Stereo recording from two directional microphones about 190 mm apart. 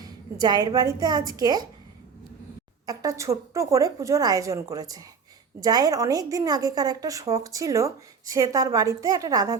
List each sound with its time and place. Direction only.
0.0 s a woman's voice: 20° right (ahead or behind)
2.8 s a woman's voice: 20° right (ahead or behind)